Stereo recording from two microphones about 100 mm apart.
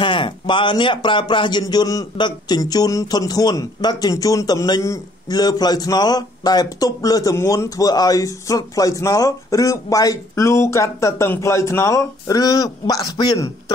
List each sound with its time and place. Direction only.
0.0 s speech: 55° left (ahead or behind)